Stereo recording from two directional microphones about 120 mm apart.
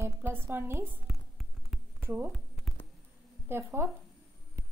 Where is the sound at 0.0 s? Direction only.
20° right (ahead or behind).